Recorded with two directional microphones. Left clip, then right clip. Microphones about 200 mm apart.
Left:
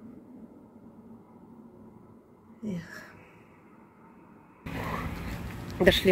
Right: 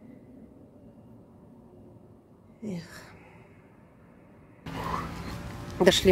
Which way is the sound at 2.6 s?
25° right (ahead or behind).